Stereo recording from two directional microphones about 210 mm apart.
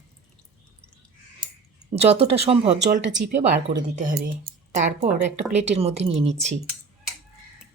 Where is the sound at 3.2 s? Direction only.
50° right (ahead or behind).